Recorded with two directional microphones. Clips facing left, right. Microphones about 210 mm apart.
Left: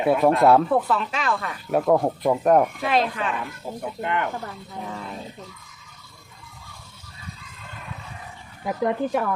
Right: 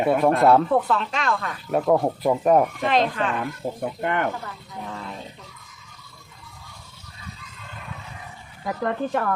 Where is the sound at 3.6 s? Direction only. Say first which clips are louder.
Right 3 dB; 60° right (ahead or behind).